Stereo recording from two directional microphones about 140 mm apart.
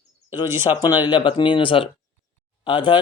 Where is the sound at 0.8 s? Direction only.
30° left (ahead or behind).